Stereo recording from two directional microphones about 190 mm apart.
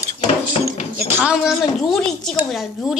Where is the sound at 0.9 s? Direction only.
5° right (ahead or behind).